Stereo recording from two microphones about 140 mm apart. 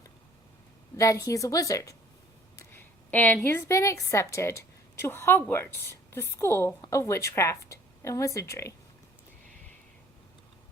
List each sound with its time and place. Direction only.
0.9 s a woman's voice: 25° left (ahead or behind)